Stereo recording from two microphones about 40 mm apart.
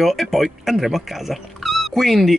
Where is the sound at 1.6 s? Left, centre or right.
Centre.